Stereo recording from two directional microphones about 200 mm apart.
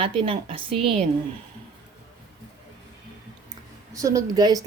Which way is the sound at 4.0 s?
15° right (ahead or behind).